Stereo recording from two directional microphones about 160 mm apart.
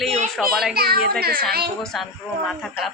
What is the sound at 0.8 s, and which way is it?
Speech, 75° right (ahead or behind).